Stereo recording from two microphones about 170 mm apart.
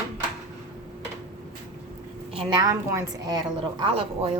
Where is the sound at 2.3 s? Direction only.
20° right (ahead or behind).